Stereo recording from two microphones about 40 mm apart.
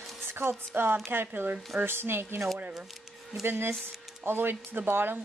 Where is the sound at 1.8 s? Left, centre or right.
Right.